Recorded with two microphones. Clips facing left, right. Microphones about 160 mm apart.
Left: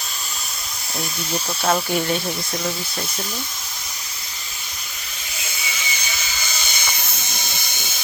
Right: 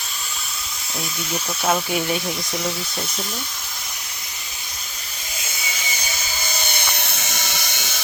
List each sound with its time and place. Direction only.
1.6 s speech: 5° right (ahead or behind)
6.7 s helicopter: 65° right (ahead or behind); by 7.9 s 80° right